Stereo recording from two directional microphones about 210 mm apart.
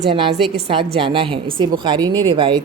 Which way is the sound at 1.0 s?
25° right (ahead or behind).